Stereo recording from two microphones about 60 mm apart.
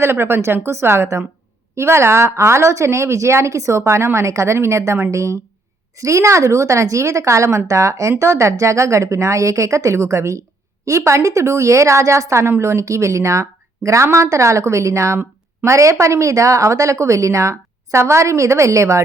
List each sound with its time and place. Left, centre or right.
0.0 s a woman's voice: right